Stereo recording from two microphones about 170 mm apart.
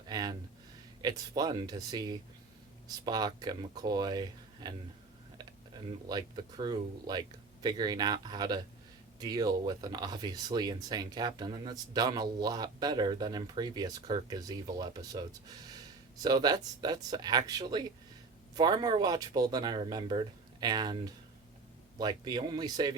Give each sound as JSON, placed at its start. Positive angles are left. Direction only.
{"t": 0.1, "sound": "a sound", "side_deg": -25}
{"t": 1.0, "sound": "speech", "side_deg": -25}
{"t": 6.1, "sound": "speech", "side_deg": -25}